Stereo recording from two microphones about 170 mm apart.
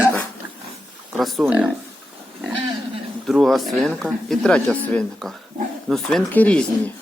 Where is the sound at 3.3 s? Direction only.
Centre (ahead or behind).